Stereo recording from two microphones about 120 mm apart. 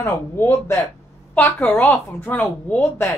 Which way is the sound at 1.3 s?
10° left (ahead or behind).